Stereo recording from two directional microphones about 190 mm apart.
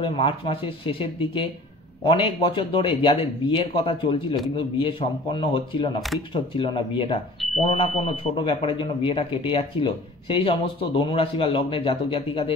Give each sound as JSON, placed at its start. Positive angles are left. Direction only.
{"t": 0.0, "sound": "speech", "side_deg": 30}